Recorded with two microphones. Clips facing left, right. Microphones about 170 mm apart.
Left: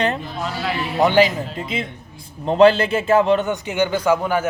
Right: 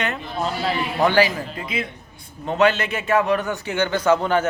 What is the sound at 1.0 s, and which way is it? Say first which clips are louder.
A man's voice: left 3 dB; 20° left (ahead or behind).